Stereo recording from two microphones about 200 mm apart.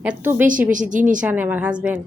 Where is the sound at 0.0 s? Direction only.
10° right (ahead or behind).